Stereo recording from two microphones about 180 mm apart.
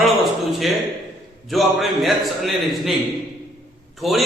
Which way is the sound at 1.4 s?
Centre (ahead or behind).